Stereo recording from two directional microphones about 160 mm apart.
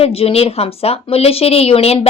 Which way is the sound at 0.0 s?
35° left (ahead or behind).